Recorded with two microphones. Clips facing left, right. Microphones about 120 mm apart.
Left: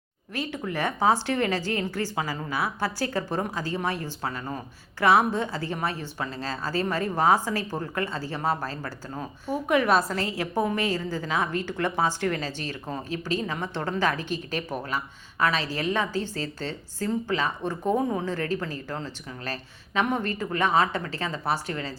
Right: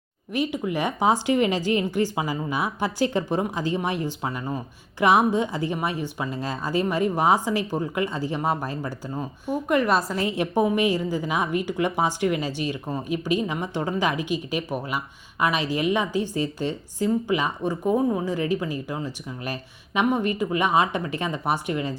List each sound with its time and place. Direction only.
0.3 s a woman's voice: 15° right (ahead or behind)
9.6 s a woman's voice: centre (ahead or behind)
10.2 s a woman's voice: 20° right (ahead or behind)